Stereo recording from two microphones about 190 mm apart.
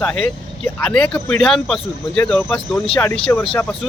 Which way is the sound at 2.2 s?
10° left (ahead or behind).